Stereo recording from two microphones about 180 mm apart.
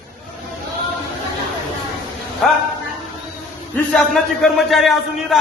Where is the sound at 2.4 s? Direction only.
Centre (ahead or behind).